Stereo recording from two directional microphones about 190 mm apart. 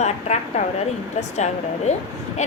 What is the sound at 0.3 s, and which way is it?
Speech, 35° left (ahead or behind).